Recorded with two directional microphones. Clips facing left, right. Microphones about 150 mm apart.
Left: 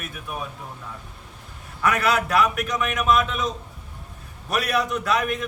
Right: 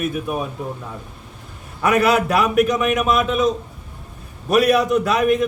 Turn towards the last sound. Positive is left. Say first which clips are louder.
# right 7 dB
turn(degrees=-5)  # may be behind; listen again after turning